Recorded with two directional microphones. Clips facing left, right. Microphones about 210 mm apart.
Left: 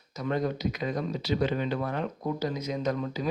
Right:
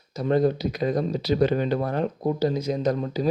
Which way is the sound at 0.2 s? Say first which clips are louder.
Right 7 dB; 35° right (ahead or behind).